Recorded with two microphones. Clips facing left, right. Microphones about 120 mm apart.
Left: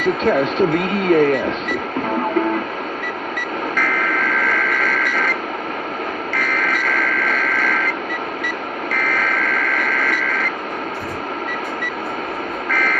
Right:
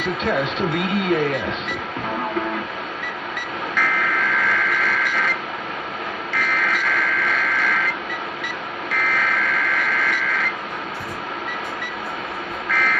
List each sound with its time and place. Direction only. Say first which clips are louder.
0.0 s speech: left 5 dB; 45° left (ahead or behind)
3.3 s vehicle: left 2 dB; 45° left (ahead or behind)
6.3 s vehicle: even; 45° left (ahead or behind)
12.7 s car alarm: left 1 dB; 45° left (ahead or behind)